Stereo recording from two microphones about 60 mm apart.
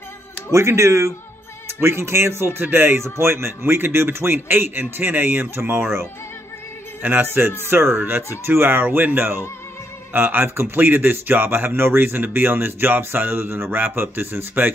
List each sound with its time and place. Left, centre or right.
0.5 s speech: right